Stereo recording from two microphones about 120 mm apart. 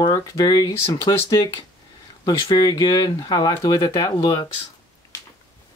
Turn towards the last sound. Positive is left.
turn(degrees=30)  # may be behind; listen again after turning